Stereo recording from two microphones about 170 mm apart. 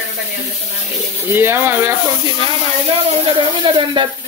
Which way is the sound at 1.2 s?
15° right (ahead or behind).